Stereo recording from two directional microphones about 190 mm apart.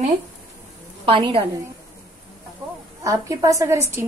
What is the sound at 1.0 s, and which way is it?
Speech, 30° right (ahead or behind).